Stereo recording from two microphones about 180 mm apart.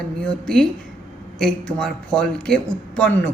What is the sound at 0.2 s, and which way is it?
A woman's voice, 5° left (ahead or behind).